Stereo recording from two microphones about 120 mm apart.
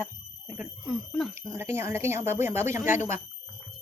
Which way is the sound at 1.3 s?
20° right (ahead or behind).